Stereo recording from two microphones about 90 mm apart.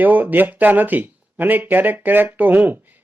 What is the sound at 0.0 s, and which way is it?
Speech, 20° right (ahead or behind).